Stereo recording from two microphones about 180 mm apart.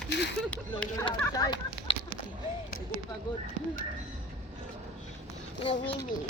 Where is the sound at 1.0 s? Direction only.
20° left (ahead or behind).